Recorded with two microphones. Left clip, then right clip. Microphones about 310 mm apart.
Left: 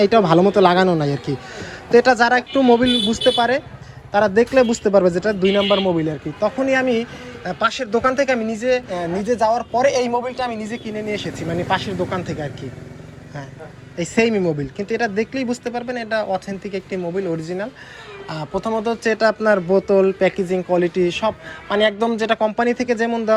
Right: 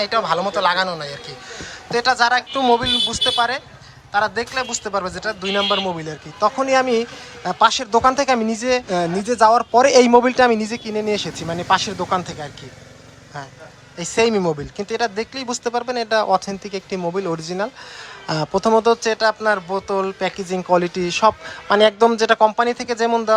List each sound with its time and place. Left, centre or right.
0.0 s a man's voice: centre
5.6 s speech: right
6.0 s speech: centre
14.0 s speech: centre
17.0 s speech: right
17.4 s speech: centre